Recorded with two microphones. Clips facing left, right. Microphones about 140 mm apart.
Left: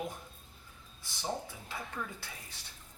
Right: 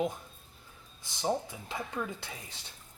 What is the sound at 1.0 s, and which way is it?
Speech, 20° right (ahead or behind).